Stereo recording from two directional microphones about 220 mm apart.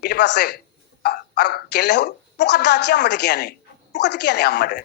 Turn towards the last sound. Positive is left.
turn(degrees=45)  # may be behind; listen again after turning